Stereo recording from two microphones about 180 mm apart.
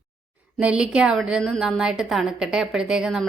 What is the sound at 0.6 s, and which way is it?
A woman's voice, 5° right (ahead or behind).